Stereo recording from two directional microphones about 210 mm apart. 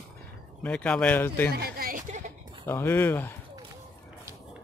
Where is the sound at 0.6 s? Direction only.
5° left (ahead or behind).